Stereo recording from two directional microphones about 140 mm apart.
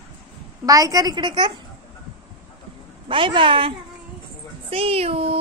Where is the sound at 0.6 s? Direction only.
25° right (ahead or behind).